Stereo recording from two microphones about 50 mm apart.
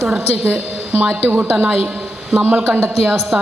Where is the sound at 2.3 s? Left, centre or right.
Right.